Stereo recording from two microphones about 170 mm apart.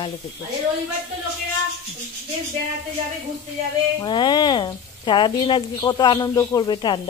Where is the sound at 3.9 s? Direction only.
25° left (ahead or behind).